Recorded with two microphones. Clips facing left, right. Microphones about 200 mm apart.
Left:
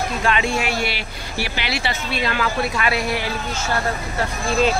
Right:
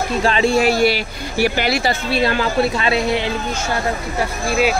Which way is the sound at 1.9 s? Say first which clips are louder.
Right 6 dB; 35° right (ahead or behind).